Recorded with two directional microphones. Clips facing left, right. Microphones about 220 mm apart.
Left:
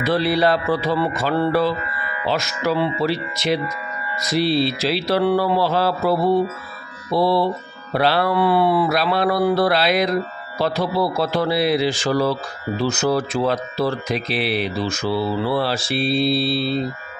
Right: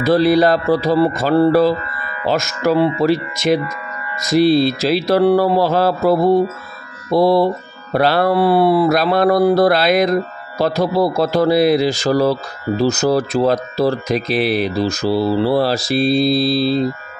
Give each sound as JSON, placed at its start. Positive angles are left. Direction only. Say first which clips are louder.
{"t": 0.0, "sound": "speech", "louder": "right 6 dB", "side_deg": -40}